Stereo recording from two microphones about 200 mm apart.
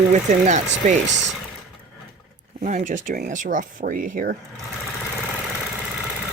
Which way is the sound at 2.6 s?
35° right (ahead or behind).